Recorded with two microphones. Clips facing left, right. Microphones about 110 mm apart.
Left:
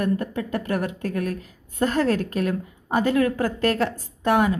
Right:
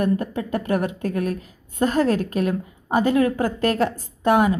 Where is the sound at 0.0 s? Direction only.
15° right (ahead or behind).